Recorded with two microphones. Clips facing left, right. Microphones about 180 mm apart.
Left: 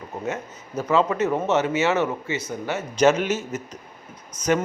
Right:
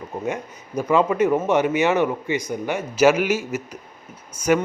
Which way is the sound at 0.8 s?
10° right (ahead or behind).